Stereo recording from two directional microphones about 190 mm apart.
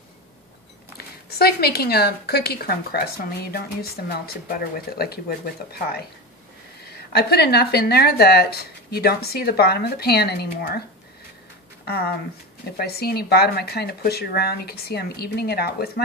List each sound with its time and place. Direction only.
0.9 s speech: 55° left (ahead or behind)
7.1 s speech: 60° left (ahead or behind)
11.8 s speech: 55° left (ahead or behind)